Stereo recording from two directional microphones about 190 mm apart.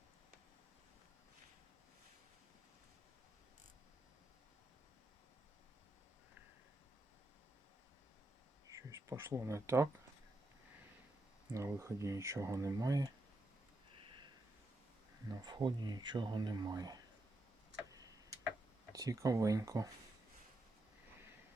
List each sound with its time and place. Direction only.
8.6 s speech: 15° right (ahead or behind)
11.5 s speech: 15° right (ahead or behind)
15.3 s speech: 20° right (ahead or behind)
17.8 s tick-tock: 20° right (ahead or behind)
18.9 s speech: 15° right (ahead or behind)